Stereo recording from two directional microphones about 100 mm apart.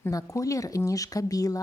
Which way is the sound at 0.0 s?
35° left (ahead or behind).